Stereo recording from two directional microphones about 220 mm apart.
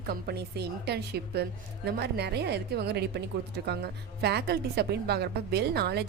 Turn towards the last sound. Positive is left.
turn(degrees=-50)  # may be behind; listen again after turning